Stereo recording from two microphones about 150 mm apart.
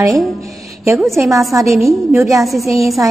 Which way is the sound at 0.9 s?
Centre (ahead or behind).